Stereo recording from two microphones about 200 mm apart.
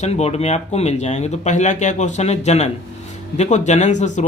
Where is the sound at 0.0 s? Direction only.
35° left (ahead or behind).